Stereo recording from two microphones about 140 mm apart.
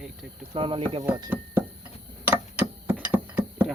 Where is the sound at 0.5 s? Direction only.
40° right (ahead or behind).